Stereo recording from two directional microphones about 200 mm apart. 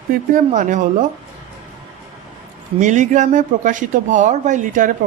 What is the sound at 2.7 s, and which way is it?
A woman's voice, 35° right (ahead or behind).